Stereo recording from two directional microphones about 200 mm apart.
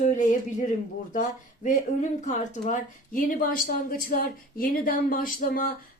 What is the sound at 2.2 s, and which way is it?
Speech, 35° left (ahead or behind).